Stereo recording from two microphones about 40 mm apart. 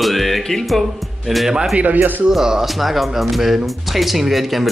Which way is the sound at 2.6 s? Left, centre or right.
Centre.